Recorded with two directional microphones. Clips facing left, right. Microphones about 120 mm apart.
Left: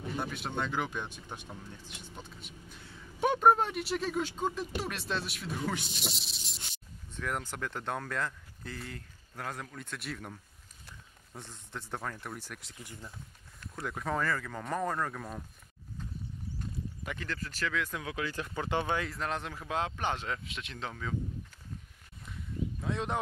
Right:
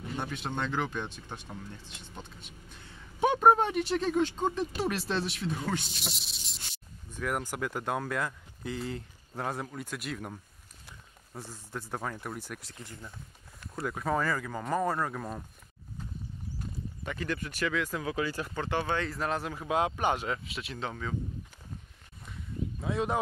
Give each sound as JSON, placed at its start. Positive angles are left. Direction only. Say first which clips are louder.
{"t": 0.2, "sound": "speech", "louder": "right 2 dB", "side_deg": 5}
{"t": 3.2, "sound": "speech", "louder": "right 2 dB", "side_deg": 0}
{"t": 8.7, "sound": "speech", "louder": "right 9 dB", "side_deg": -25}
{"t": 9.9, "sound": "speech", "louder": "right 2 dB", "side_deg": -5}
{"t": 16.5, "sound": "a sound", "louder": "even", "side_deg": 0}
{"t": 17.3, "sound": "speech", "louder": "right 4 dB", "side_deg": -15}
{"t": 18.5, "sound": "speech", "louder": "right 1 dB", "side_deg": 15}
{"t": 18.9, "sound": "speech", "louder": "right 3 dB", "side_deg": 0}
{"t": 22.8, "sound": "speech", "louder": "right 4 dB", "side_deg": -5}